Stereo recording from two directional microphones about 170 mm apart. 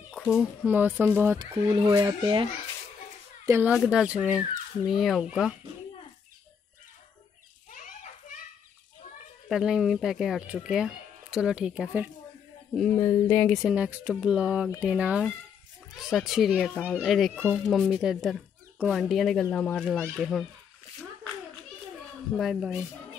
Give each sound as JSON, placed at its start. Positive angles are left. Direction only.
{"t": 0.1, "sound": "speech", "side_deg": -5}
{"t": 3.4, "sound": "speech", "side_deg": -15}
{"t": 3.7, "sound": "speech", "side_deg": -5}
{"t": 7.7, "sound": "children playing", "side_deg": 45}
{"t": 9.5, "sound": "speech", "side_deg": -5}
{"t": 12.9, "sound": "speech", "side_deg": 15}
{"t": 22.4, "sound": "speech", "side_deg": 0}